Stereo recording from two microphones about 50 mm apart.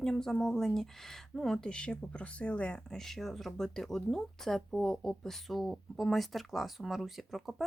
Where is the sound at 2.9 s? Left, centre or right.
Centre.